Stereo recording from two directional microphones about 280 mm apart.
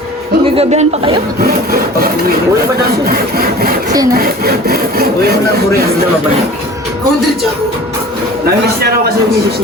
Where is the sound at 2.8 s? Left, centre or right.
Right.